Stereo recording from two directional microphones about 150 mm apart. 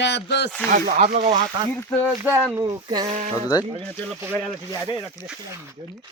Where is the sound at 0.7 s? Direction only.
60° right (ahead or behind).